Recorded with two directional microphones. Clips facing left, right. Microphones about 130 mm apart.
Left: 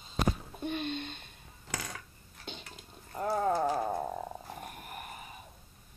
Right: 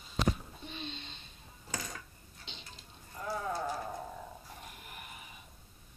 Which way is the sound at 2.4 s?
50° left (ahead or behind).